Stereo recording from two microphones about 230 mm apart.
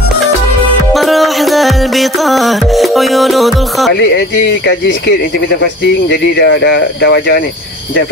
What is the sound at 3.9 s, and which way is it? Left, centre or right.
Speech, left.